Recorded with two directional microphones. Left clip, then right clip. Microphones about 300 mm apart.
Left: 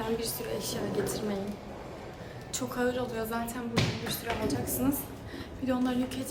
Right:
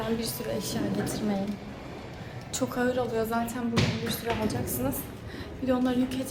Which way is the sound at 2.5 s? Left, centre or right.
Centre.